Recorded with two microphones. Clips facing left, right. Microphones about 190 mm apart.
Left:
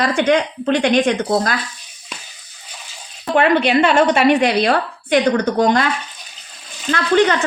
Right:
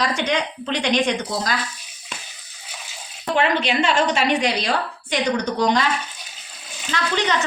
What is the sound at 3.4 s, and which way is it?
A woman's voice, 55° left (ahead or behind).